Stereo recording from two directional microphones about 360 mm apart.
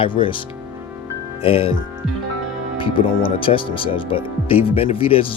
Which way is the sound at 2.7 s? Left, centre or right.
Centre.